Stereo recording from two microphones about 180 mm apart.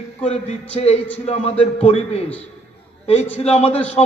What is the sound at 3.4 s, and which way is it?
Speech, 35° left (ahead or behind).